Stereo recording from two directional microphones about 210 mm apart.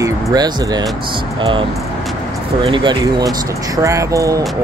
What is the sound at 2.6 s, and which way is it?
Speech, 20° right (ahead or behind).